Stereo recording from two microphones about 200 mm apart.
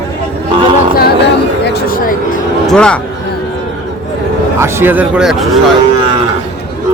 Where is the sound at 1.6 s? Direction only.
50° left (ahead or behind).